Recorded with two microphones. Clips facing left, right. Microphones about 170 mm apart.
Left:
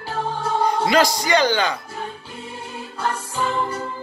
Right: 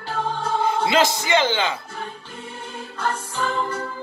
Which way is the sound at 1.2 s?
20° right (ahead or behind).